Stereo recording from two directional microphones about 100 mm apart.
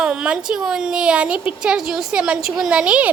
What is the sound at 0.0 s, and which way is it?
A woman's voice, 10° right (ahead or behind).